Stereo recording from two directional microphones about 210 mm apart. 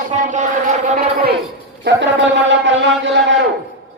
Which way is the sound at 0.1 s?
35° right (ahead or behind).